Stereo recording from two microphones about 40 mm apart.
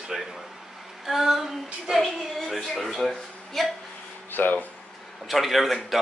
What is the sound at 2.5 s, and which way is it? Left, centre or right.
Speech, centre.